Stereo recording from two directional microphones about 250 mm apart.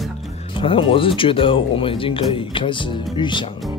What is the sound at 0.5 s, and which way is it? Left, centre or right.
Speech, left.